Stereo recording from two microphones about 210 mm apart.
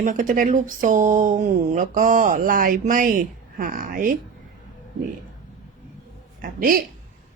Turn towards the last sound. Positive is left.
turn(degrees=-45)  # may be behind; listen again after turning